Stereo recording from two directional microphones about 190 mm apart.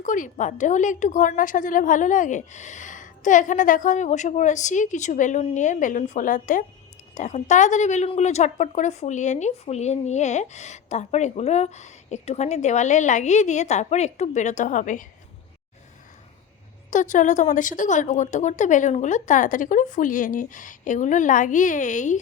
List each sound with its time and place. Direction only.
0.0 s speech: 45° left (ahead or behind)
16.9 s speech: 40° left (ahead or behind)